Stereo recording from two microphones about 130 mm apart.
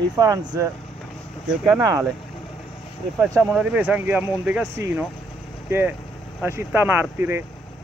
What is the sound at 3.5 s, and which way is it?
Speech, 10° right (ahead or behind).